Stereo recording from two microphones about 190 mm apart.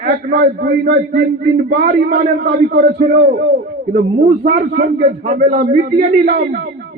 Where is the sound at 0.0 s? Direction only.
50° right (ahead or behind).